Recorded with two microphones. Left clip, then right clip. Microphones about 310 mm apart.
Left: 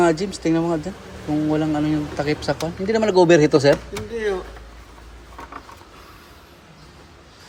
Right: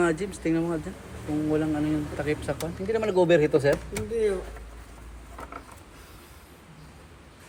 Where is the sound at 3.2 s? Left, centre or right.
Left.